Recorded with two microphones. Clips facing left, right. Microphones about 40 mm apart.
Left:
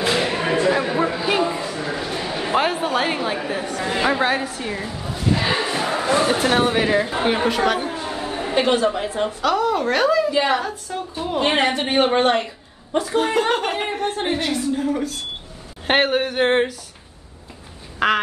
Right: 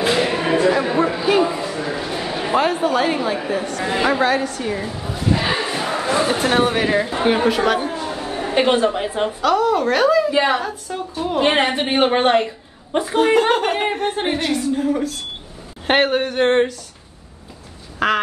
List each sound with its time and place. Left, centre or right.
0.0 s a sound: centre
2.5 s a woman's voice: centre
4.2 s a woman's voice: centre
8.5 s a woman's voice: centre
9.4 s a woman's voice: centre; by 13.2 s right
13.2 s a woman's voice: centre
17.9 s quack: centre